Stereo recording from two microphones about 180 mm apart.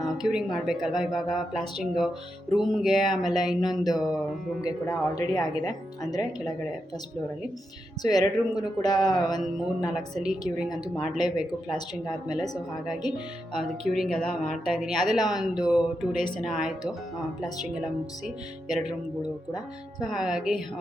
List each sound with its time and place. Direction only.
0.0 s speech: 5° right (ahead or behind)
3.6 s speech: 20° left (ahead or behind)
8.0 s speech: 20° left (ahead or behind)
9.9 s speech: centre (ahead or behind)
13.5 s speech: centre (ahead or behind)
20.0 s speech: 5° right (ahead or behind)